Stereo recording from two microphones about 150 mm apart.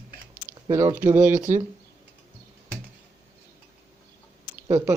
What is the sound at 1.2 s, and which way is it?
Speech, 55° right (ahead or behind).